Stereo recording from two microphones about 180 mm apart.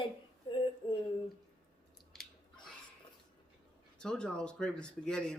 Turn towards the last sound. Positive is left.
turn(degrees=5)  # may be behind; listen again after turning